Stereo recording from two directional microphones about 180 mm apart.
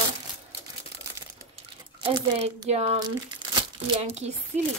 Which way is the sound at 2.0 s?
30° right (ahead or behind).